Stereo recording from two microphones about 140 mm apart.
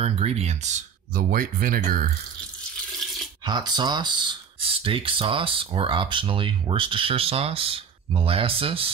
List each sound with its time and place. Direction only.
0.0 s speech: 50° right (ahead or behind); by 2.0 s 80° right
3.4 s speech: 30° right (ahead or behind)